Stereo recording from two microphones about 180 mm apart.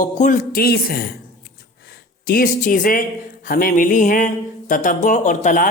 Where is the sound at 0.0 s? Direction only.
45° left (ahead or behind).